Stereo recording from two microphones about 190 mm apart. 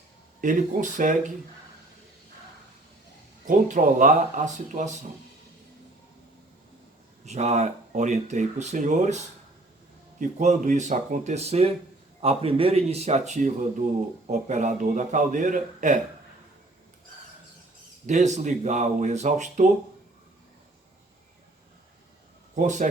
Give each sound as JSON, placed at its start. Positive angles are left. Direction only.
{"t": 0.4, "sound": "speech", "side_deg": -45}
{"t": 3.4, "sound": "speech", "side_deg": -40}
{"t": 7.3, "sound": "speech", "side_deg": -35}
{"t": 18.0, "sound": "speech", "side_deg": -40}
{"t": 22.5, "sound": "speech", "side_deg": -40}